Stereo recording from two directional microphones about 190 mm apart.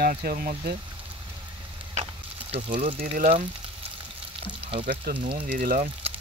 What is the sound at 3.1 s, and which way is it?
Speech, 45° right (ahead or behind).